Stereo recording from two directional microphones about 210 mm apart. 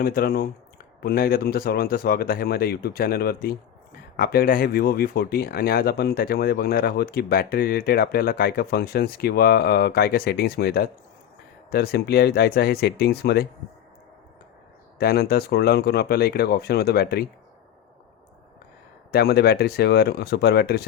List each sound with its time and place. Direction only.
0.0 s speech: 45° left (ahead or behind)
14.9 s speech: 45° left (ahead or behind)
19.1 s speech: 50° left (ahead or behind)